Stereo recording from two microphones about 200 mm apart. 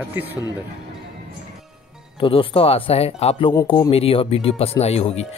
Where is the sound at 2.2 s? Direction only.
25° left (ahead or behind).